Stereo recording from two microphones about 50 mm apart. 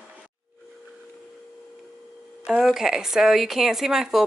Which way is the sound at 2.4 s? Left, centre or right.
Centre.